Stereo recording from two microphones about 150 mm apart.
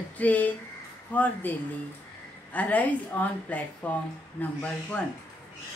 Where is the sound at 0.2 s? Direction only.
10° left (ahead or behind).